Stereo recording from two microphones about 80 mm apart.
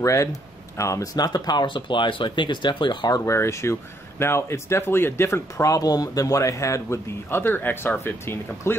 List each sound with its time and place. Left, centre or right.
0.0 s speech: left
3.3 s speech: left
7.2 s speech: left